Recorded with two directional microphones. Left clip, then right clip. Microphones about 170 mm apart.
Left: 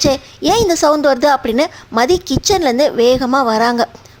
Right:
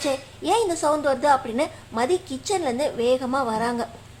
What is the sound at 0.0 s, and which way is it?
A woman's voice, 45° left (ahead or behind).